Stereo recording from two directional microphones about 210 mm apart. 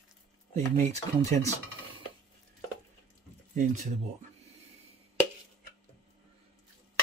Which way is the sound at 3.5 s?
40° right (ahead or behind).